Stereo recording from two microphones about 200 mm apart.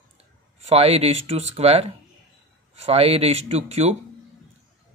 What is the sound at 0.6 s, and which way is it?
Speech, 30° right (ahead or behind).